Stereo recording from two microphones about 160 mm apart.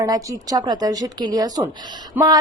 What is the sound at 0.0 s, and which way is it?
A woman's voice, 20° right (ahead or behind).